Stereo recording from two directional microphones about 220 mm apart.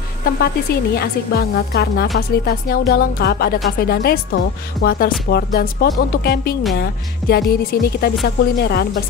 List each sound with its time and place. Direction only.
0.9 s speech: 45° left (ahead or behind)